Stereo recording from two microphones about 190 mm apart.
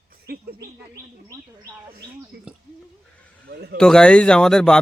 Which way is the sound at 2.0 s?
60° right (ahead or behind).